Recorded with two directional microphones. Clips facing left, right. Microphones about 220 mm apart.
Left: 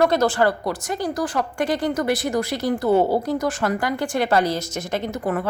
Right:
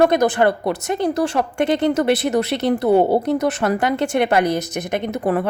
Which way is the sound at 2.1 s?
70° right (ahead or behind).